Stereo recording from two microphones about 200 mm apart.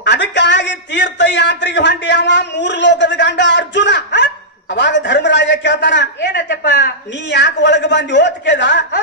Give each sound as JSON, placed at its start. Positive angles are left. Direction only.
{"t": 0.0, "sound": "a man's voice", "side_deg": 60}